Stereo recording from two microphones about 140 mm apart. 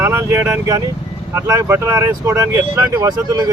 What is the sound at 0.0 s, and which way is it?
Speech, 20° right (ahead or behind).